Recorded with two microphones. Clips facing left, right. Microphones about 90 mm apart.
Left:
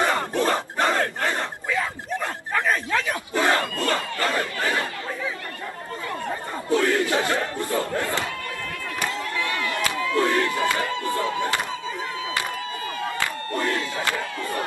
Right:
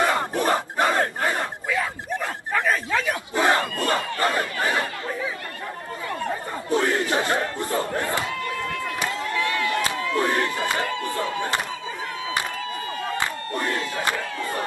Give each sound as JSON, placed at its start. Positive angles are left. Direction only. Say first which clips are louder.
{"t": 0.0, "sound": "battle cry", "louder": "even", "side_deg": -15}
{"t": 2.9, "sound": "battle cry", "louder": "even", "side_deg": -15}
{"t": 4.4, "sound": "chatter", "louder": "right 1 dB", "side_deg": -25}
{"t": 6.7, "sound": "battle cry", "louder": "left 1 dB", "side_deg": -25}
{"t": 8.8, "sound": "crowd", "louder": "right 1 dB", "side_deg": -25}
{"t": 9.4, "sound": "a sound", "louder": "right 3 dB", "side_deg": 25}
{"t": 9.7, "sound": "battle cry", "louder": "right 1 dB", "side_deg": -25}
{"t": 11.0, "sound": "a sound", "louder": "left 2 dB", "side_deg": 20}
{"t": 13.2, "sound": "crowd", "louder": "left 1 dB", "side_deg": -20}